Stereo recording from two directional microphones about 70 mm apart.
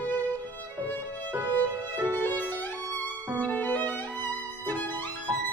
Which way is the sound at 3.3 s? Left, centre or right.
Left.